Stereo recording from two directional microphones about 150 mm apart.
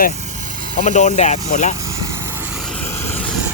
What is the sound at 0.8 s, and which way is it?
Speech, 50° left (ahead or behind).